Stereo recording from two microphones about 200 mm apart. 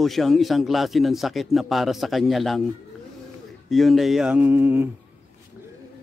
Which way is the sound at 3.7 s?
Centre (ahead or behind).